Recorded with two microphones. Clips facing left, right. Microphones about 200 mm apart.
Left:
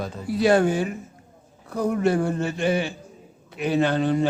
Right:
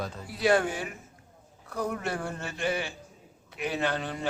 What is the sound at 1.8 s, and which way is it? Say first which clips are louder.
A man's voice: left 10 dB; 20° left (ahead or behind).